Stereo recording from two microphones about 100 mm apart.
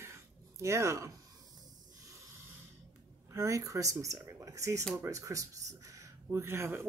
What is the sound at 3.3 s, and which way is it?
Speech, 30° right (ahead or behind).